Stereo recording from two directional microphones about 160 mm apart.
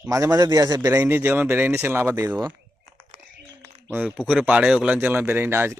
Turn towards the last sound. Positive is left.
turn(degrees=-15)  # may be behind; listen again after turning